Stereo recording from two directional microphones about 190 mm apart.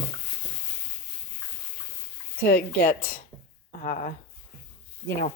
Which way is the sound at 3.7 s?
45° left (ahead or behind).